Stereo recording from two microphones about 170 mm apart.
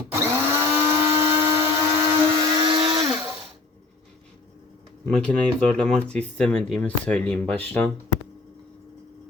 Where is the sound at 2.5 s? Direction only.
30° right (ahead or behind).